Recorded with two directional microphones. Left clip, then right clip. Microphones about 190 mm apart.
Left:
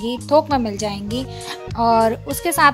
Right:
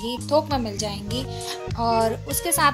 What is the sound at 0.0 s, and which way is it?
Speech, 35° left (ahead or behind).